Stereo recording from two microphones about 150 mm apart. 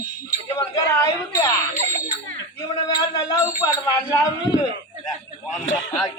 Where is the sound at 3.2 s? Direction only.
20° left (ahead or behind).